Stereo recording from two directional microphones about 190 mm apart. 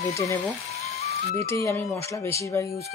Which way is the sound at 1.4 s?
15° left (ahead or behind).